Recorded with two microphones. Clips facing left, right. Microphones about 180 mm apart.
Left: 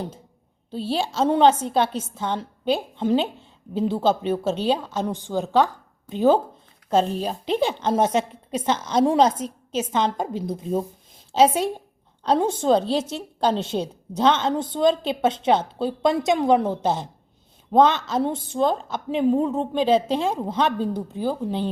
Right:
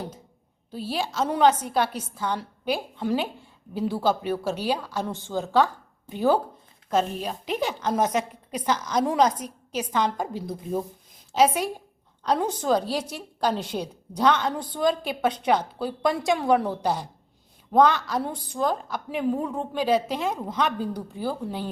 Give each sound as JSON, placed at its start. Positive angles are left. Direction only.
{"t": 0.7, "sound": "a woman's voice", "side_deg": 25}